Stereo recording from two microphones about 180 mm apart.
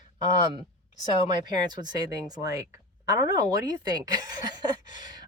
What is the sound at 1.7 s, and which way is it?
A woman's voice, 25° right (ahead or behind).